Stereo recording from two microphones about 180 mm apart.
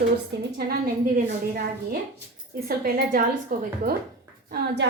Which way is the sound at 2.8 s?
50° right (ahead or behind).